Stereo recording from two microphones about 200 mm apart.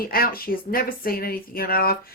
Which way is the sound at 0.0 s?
45° left (ahead or behind).